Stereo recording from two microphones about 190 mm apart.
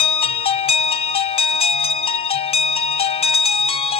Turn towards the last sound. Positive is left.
turn(degrees=30)  # may be behind; listen again after turning